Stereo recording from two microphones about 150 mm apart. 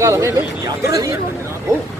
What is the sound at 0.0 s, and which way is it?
Speech, 20° right (ahead or behind).